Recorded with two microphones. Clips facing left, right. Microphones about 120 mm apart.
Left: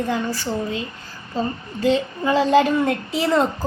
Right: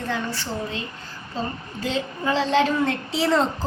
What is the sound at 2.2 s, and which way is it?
A woman's voice, 10° left (ahead or behind).